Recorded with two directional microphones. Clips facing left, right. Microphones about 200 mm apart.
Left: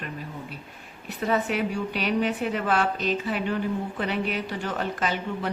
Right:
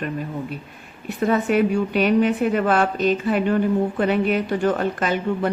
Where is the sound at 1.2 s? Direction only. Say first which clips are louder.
Right 7 dB; 50° right (ahead or behind).